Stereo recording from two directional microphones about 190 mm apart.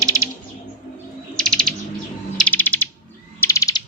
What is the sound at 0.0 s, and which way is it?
Bird, 15° right (ahead or behind).